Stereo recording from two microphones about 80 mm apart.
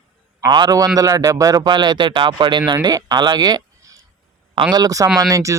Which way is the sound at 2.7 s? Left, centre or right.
Right.